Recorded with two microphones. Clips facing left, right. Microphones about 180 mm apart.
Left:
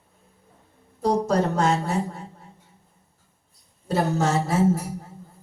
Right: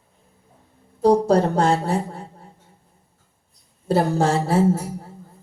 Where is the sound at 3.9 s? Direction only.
30° right (ahead or behind).